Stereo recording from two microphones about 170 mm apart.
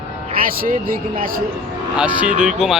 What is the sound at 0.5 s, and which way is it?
Speech, 60° right (ahead or behind).